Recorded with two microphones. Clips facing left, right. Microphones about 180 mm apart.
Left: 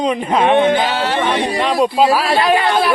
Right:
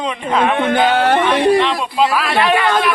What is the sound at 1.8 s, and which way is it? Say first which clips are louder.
Speech: left 4 dB; 35° left (ahead or behind).